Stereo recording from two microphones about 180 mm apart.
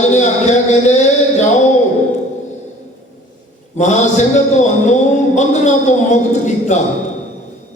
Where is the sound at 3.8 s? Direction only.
40° left (ahead or behind).